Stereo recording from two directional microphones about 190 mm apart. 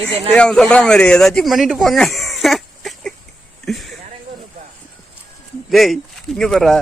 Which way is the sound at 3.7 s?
Centre (ahead or behind).